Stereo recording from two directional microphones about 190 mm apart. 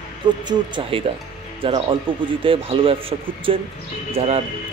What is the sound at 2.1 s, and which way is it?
Speech, 25° right (ahead or behind).